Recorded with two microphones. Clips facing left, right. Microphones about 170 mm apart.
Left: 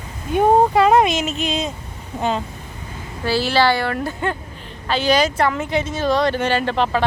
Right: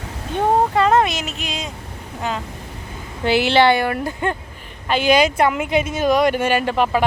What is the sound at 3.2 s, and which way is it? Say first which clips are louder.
Speech: right 3 dB; 20° right (ahead or behind).